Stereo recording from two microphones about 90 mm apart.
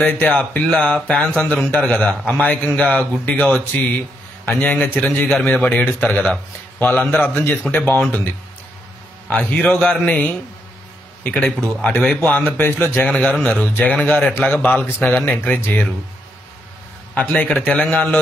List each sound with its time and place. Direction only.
0.0 s speech: 15° left (ahead or behind)
6.2 s speech: 5° left (ahead or behind)
6.9 s speech: 20° left (ahead or behind)
9.5 s speech: 20° left (ahead or behind)
17.1 s speech: 15° left (ahead or behind)